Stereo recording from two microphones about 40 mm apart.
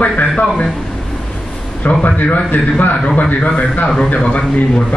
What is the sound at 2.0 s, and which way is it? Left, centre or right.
A man's voice, left.